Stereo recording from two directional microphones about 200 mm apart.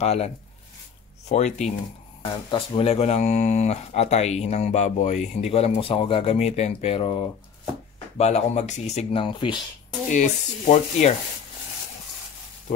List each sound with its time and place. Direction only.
0.0 s speech: 30° left (ahead or behind)
1.3 s speech: 35° left (ahead or behind)
10.1 s speech: 35° left (ahead or behind)